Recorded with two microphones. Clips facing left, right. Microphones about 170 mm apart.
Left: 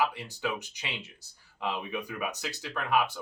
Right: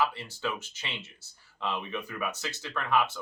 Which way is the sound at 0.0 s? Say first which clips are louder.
Even; 15° left (ahead or behind).